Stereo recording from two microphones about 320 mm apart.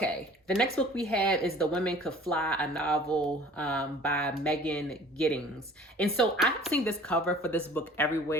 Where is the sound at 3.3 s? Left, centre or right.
Centre.